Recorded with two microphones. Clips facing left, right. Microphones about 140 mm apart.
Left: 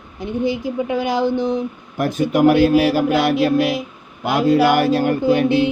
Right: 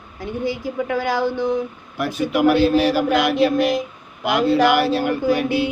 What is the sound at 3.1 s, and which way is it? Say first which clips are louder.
Music: left 1 dB; 5° left (ahead or behind).